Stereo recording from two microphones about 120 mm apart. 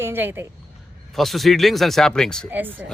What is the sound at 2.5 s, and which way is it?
Speech, 15° right (ahead or behind).